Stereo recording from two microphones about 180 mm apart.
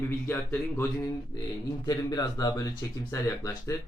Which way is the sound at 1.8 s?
20° left (ahead or behind).